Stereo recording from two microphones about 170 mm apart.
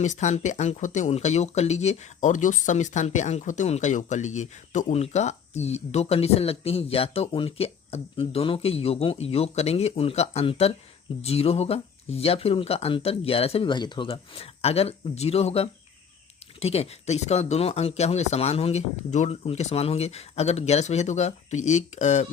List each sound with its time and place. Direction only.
0.0 s speech: 45° left (ahead or behind)